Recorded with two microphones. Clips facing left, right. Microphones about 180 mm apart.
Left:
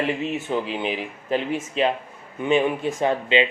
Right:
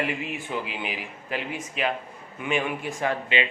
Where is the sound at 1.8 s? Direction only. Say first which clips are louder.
Left 5 dB; 25° left (ahead or behind).